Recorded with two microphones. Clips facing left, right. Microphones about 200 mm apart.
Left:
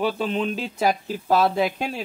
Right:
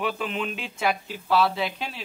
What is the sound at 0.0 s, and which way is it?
Speech, 35° left (ahead or behind).